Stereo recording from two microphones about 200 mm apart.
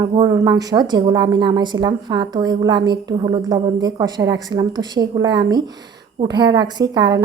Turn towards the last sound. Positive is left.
turn(degrees=-20)  # may be behind; listen again after turning